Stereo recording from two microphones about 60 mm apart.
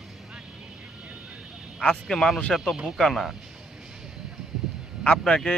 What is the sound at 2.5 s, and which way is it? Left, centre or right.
Speech, centre.